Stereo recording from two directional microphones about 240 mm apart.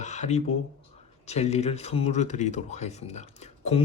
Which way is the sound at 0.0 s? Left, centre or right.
Left.